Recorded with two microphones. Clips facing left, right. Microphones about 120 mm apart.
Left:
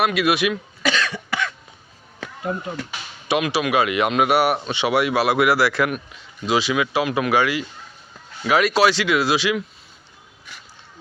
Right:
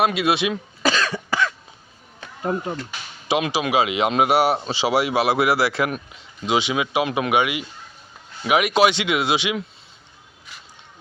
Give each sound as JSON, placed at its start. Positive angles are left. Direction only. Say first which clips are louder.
{"t": 0.0, "sound": "speech", "louder": "even", "side_deg": -25}
{"t": 3.2, "sound": "speech", "louder": "left 1 dB", "side_deg": -25}